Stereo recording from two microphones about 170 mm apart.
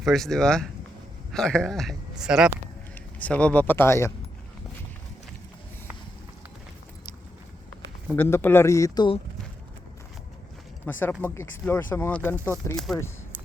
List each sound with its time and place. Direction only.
0.0 s speech: centre (ahead or behind)
2.9 s speech: 10° left (ahead or behind)
8.1 s speech: 15° left (ahead or behind)
10.9 s speech: 10° left (ahead or behind)
12.7 s speech: centre (ahead or behind)